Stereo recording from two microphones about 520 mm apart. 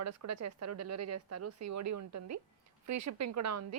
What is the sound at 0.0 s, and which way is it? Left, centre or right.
A woman's voice, right.